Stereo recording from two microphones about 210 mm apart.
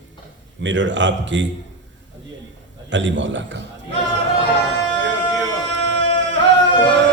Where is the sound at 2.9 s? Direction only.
60° right (ahead or behind).